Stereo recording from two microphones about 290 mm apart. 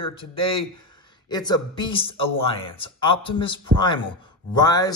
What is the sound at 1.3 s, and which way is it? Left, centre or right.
A man's voice, centre.